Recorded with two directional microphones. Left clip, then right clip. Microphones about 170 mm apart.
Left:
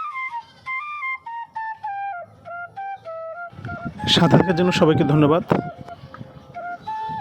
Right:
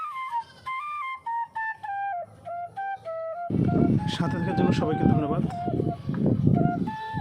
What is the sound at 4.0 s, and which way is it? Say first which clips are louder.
Speech: left 14 dB; 45° left (ahead or behind).